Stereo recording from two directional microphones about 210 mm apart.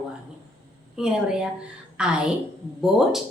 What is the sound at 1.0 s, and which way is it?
A woman's voice, 5° right (ahead or behind).